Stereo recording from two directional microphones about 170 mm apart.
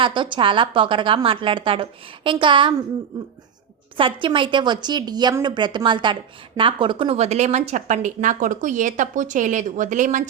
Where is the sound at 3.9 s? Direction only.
30° right (ahead or behind).